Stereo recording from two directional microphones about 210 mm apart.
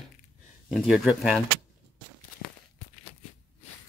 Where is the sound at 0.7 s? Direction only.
Centre (ahead or behind).